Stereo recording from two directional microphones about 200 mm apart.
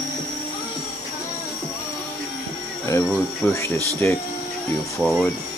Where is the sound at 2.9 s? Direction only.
15° left (ahead or behind).